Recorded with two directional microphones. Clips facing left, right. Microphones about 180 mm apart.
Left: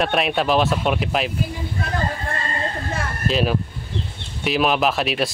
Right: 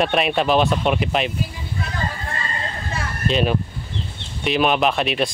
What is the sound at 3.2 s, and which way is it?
Speech, centre (ahead or behind).